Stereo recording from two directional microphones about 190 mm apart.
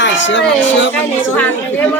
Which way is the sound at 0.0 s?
75° left (ahead or behind).